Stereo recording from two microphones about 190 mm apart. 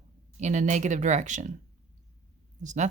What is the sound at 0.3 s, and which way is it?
Speech, 40° right (ahead or behind).